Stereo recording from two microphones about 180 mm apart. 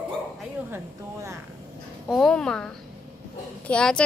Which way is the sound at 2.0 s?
Centre (ahead or behind).